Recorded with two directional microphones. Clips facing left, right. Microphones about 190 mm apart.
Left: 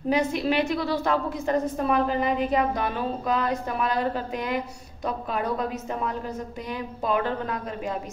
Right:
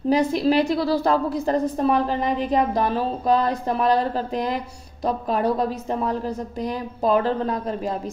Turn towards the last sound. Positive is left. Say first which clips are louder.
# right 5 dB
turn(degrees=-35)  # may be behind; listen again after turning